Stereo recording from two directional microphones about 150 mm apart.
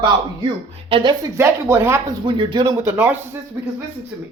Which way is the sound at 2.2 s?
35° right (ahead or behind).